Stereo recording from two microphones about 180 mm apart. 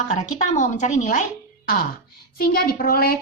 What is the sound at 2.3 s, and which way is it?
Speech, 55° left (ahead or behind).